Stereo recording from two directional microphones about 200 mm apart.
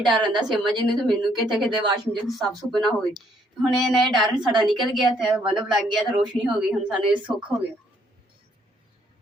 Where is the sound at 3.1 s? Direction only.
Centre (ahead or behind).